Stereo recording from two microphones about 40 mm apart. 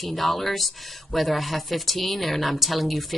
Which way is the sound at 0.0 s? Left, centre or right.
Centre.